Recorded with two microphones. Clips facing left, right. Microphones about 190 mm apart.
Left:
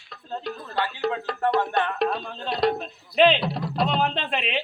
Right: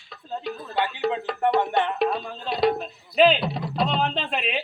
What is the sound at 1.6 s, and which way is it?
Music, 20° right (ahead or behind).